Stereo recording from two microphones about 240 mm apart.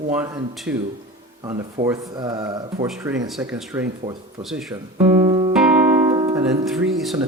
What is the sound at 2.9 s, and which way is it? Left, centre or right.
Speech, centre.